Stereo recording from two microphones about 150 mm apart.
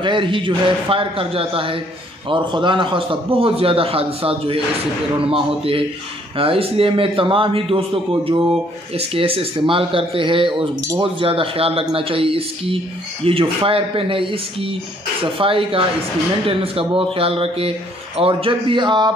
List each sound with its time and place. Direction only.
0.0 s a man's voice: 35° right (ahead or behind)